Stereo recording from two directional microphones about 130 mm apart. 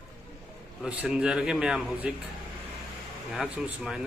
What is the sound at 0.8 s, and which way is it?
Speech, 10° right (ahead or behind).